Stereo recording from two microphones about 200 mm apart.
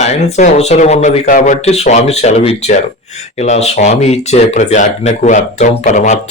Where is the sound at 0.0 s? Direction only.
35° left (ahead or behind).